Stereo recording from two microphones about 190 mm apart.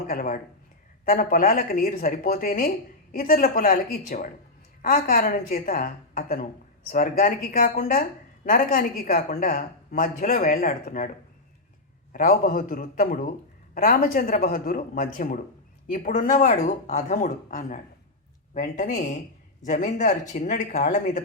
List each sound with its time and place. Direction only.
0.1 s speech: 50° left (ahead or behind)
12.1 s speech: 50° left (ahead or behind)